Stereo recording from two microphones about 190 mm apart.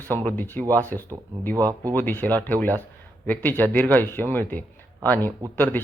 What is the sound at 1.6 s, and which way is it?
Speech, 20° right (ahead or behind).